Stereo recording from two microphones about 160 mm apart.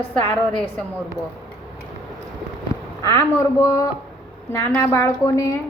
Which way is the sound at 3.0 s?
20° left (ahead or behind).